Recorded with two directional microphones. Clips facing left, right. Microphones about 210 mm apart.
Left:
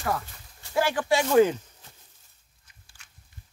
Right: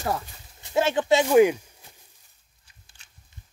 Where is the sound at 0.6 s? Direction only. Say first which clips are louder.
Right 3 dB; 20° right (ahead or behind).